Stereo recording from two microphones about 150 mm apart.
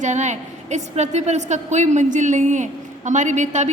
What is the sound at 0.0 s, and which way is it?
A woman's voice, 55° right (ahead or behind).